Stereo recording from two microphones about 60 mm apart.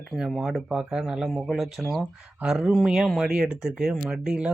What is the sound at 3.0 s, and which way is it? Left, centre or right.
Speech, centre.